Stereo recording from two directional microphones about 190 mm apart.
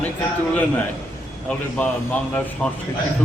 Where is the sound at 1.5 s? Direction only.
5° left (ahead or behind).